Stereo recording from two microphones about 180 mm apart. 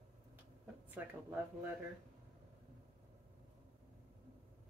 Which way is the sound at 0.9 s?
10° right (ahead or behind).